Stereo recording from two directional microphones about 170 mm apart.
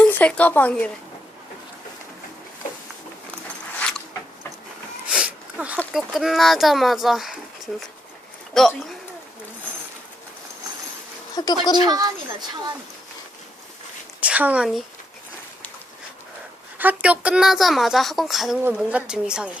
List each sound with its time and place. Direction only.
0.0 s speech: 10° left (ahead or behind)
3.8 s a sound: 5° left (ahead or behind)
5.0 s sneeze: 5° right (ahead or behind)
5.9 s a woman's voice: centre (ahead or behind)
8.5 s a woman's voice: centre (ahead or behind)
11.4 s speech: 25° left (ahead or behind)
11.9 s speech: 25° right (ahead or behind)
14.2 s speech: 10° right (ahead or behind)
16.7 s a woman's voice: 10° right (ahead or behind)